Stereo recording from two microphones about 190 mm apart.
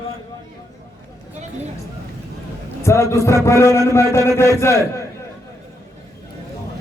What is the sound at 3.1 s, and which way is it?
A man's voice, 15° left (ahead or behind).